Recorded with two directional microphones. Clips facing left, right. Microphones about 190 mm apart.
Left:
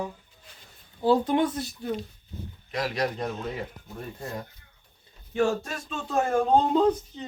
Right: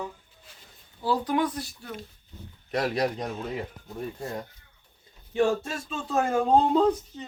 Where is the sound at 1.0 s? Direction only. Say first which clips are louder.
Left 4 dB; 25° left (ahead or behind).